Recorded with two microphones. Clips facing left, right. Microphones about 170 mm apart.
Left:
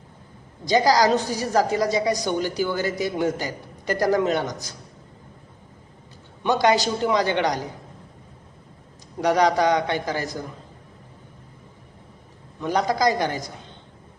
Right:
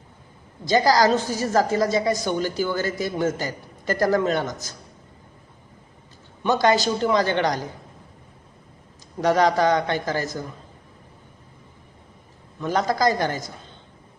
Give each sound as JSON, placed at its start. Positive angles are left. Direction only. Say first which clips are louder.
{"t": 0.6, "sound": "a woman's voice", "louder": "even", "side_deg": 15}
{"t": 6.4, "sound": "a woman's voice", "louder": "even", "side_deg": 15}
{"t": 9.2, "sound": "a woman's voice", "louder": "even", "side_deg": 15}
{"t": 12.5, "sound": "a woman's voice", "louder": "even", "side_deg": 15}